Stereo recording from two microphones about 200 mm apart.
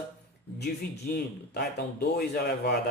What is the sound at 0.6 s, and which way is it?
Speech, 55° left (ahead or behind).